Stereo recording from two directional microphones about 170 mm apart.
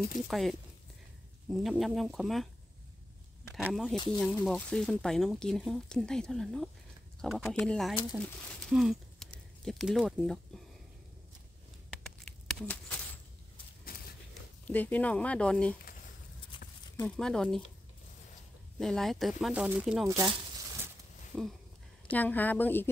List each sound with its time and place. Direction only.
0.3 s speech: centre (ahead or behind)
3.5 s speech: 5° right (ahead or behind)
3.9 s speech: 25° left (ahead or behind)
4.2 s speech: 5° left (ahead or behind)
12.4 s a sound: 5° left (ahead or behind)
14.7 s speech: 10° left (ahead or behind)
16.5 s horse: 25° left (ahead or behind)
17.0 s speech: 5° left (ahead or behind)
18.8 s speech: centre (ahead or behind)
20.1 s speech: 20° right (ahead or behind)
21.3 s speech: centre (ahead or behind)